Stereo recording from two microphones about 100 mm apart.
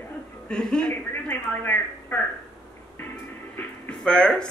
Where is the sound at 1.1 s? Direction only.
20° left (ahead or behind).